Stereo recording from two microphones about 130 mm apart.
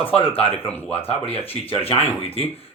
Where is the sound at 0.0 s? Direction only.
45° left (ahead or behind).